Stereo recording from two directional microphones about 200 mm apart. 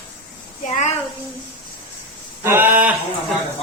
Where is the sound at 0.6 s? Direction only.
35° left (ahead or behind).